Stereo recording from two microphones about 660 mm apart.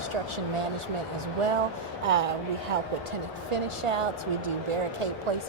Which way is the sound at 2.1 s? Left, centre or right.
Right.